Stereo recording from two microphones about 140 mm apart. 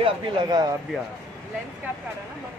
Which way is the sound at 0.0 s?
30° right (ahead or behind).